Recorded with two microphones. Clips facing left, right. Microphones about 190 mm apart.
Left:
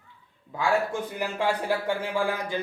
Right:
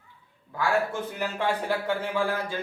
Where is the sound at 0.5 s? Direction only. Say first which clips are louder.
Left 1 dB; 15° left (ahead or behind).